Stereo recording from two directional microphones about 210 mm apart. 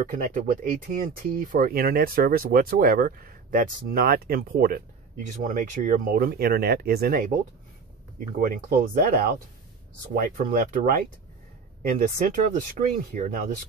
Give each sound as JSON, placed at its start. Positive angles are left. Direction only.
{"t": 0.0, "sound": "speech", "side_deg": -40}
{"t": 8.4, "sound": "speech", "side_deg": -40}
{"t": 10.3, "sound": "speech", "side_deg": -40}